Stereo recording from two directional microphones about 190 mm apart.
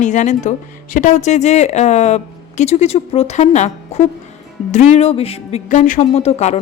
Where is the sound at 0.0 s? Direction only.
40° left (ahead or behind).